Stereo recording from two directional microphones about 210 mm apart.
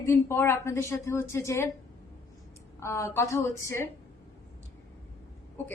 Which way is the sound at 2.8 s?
15° left (ahead or behind).